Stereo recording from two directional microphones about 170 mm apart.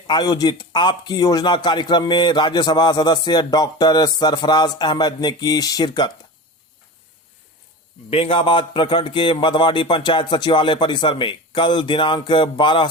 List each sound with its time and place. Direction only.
0.1 s a man's voice: 25° left (ahead or behind)
8.1 s a man's voice: 35° left (ahead or behind)